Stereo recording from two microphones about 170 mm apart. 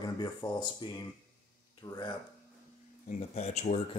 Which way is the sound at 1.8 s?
25° left (ahead or behind).